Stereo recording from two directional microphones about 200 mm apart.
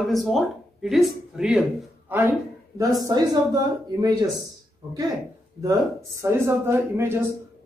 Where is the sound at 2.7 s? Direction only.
20° right (ahead or behind).